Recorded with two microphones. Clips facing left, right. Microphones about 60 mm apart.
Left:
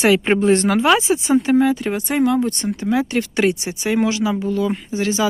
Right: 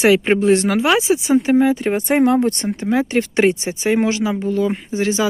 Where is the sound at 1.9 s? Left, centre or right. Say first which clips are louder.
Right 3 dB; right.